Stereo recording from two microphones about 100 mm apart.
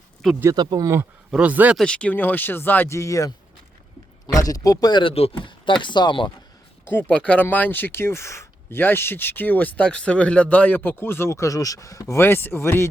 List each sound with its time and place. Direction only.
0.5 s speech: 45° right (ahead or behind)
1.3 s speech: 15° right (ahead or behind)
1.7 s speech: 10° left (ahead or behind); by 3.3 s 35° left (ahead or behind)
4.4 s speech: 35° left (ahead or behind)
5.1 s speech: 70° left (ahead or behind); by 6.3 s 50° left (ahead or behind)
6.8 s speech: 15° left (ahead or behind)